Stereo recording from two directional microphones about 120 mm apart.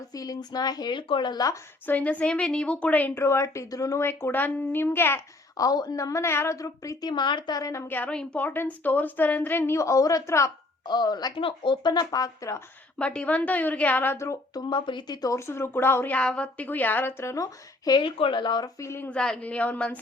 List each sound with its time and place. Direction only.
0.1 s a woman's voice: 30° left (ahead or behind)
1.9 s a woman's voice: 10° left (ahead or behind)
3.2 s a woman's voice: 25° left (ahead or behind)
5.5 s a woman's voice: 30° left (ahead or behind)
7.1 s a woman's voice: 40° left (ahead or behind)
13.0 s a woman's voice: 10° left (ahead or behind)
14.7 s a woman's voice: 40° left (ahead or behind)
18.8 s a woman's voice: 20° left (ahead or behind)
19.1 s a woman's voice: 5° left (ahead or behind)